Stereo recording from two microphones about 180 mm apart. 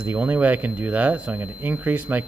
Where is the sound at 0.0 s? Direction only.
10° right (ahead or behind).